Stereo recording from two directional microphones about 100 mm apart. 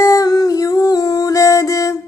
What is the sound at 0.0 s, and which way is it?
Music, 35° left (ahead or behind).